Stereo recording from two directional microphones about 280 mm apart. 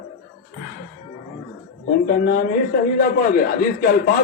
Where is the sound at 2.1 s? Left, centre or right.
Left.